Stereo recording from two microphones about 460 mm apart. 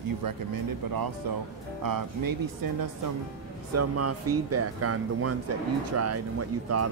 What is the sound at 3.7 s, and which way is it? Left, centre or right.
Speech, right.